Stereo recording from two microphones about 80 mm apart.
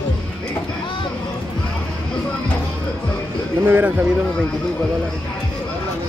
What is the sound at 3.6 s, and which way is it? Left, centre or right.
Speech, right.